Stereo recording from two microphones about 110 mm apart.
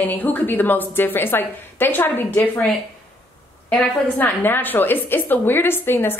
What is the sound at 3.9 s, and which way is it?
A woman's voice, 15° left (ahead or behind).